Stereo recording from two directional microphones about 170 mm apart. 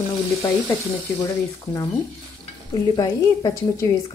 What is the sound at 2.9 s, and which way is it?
Speech, 20° left (ahead or behind).